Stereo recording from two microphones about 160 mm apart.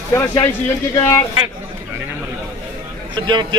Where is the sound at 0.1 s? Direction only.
20° left (ahead or behind).